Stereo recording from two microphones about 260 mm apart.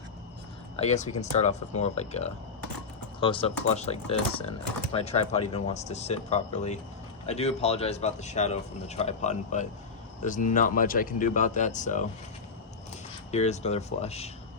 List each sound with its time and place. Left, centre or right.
0.8 s speech: left
13.3 s speech: left